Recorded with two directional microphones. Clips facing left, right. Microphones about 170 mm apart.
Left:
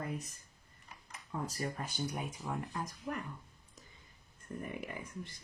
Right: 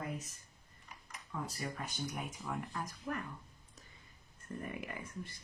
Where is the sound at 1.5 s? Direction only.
35° left (ahead or behind).